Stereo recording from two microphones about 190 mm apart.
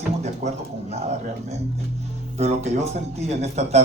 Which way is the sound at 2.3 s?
35° right (ahead or behind).